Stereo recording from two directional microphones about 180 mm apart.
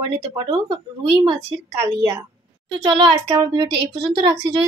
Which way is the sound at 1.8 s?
15° right (ahead or behind).